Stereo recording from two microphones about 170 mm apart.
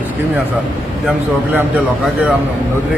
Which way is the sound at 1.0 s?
10° right (ahead or behind).